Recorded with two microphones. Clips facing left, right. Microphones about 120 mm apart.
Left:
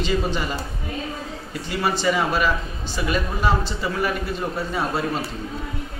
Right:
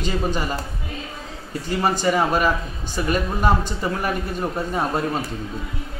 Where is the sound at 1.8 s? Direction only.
40° right (ahead or behind).